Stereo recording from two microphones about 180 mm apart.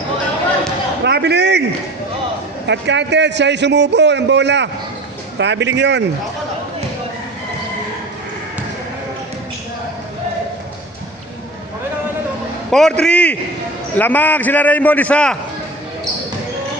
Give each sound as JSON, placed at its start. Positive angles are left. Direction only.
{"t": 1.0, "sound": "a man's voice", "side_deg": -70}
{"t": 2.6, "sound": "a man's voice", "side_deg": -75}
{"t": 12.7, "sound": "a man's voice", "side_deg": 5}